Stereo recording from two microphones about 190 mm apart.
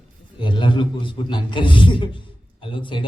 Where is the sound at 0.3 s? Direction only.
25° left (ahead or behind).